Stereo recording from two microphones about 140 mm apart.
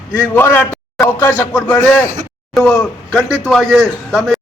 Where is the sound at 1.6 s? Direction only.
10° left (ahead or behind).